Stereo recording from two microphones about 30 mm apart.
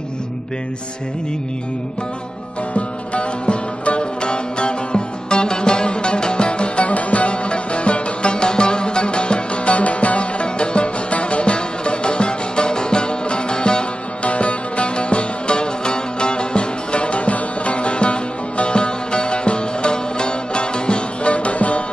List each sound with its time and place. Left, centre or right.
2.7 s music: left
6.9 s music: left
14.2 s music: left